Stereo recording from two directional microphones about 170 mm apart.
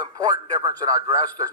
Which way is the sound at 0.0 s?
25° right (ahead or behind).